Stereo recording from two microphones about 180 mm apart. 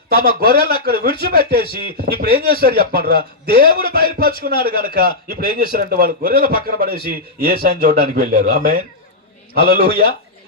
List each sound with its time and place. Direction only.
0.1 s speech: 55° right (ahead or behind)